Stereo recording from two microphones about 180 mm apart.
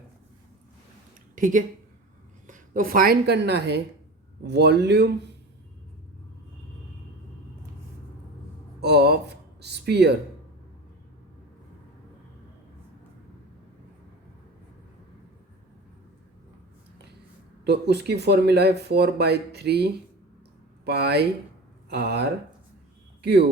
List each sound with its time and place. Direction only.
1.4 s a woman's voice: 45° right (ahead or behind); by 5.3 s 65° right (ahead or behind)
8.8 s speech: 65° right (ahead or behind)
17.7 s speech: 65° right (ahead or behind)